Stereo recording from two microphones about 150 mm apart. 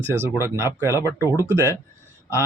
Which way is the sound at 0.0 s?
15° right (ahead or behind).